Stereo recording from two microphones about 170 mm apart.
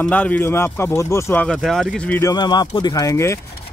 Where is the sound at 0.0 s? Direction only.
10° left (ahead or behind).